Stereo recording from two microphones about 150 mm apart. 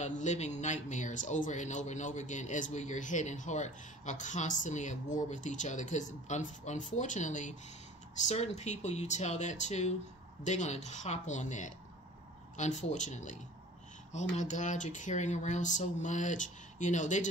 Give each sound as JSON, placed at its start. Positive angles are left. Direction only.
{"t": 0.0, "sound": "a man's voice", "side_deg": 50}